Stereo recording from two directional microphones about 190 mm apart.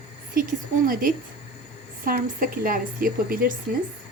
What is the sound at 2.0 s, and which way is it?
A woman's voice, 45° right (ahead or behind).